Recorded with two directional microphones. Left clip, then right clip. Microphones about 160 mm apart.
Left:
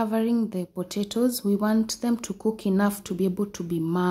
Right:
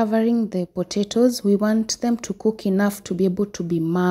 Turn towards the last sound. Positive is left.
turn(degrees=-35)  # may be behind; listen again after turning